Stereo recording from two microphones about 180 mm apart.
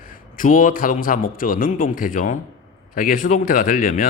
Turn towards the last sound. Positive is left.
turn(degrees=45)  # may be behind; listen again after turning